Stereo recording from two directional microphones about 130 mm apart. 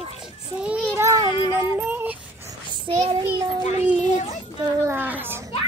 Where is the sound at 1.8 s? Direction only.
15° right (ahead or behind).